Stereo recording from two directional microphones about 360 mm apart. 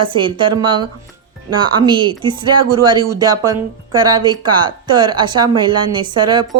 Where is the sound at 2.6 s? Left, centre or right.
Right.